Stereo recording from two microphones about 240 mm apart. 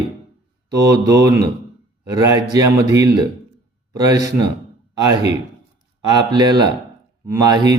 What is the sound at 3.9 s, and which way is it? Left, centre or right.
Speech, centre.